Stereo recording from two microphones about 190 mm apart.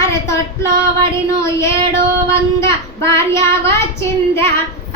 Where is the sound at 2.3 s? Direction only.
15° left (ahead or behind).